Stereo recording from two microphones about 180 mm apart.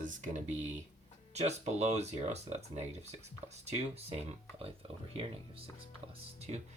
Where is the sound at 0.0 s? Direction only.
40° right (ahead or behind).